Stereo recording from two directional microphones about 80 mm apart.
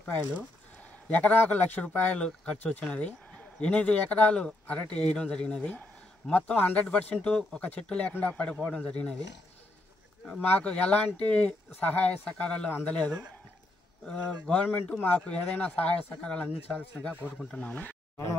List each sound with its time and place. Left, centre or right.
1.0 s speech: centre
10.4 s speech: centre